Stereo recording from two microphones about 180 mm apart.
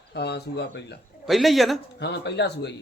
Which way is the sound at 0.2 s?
70° left (ahead or behind).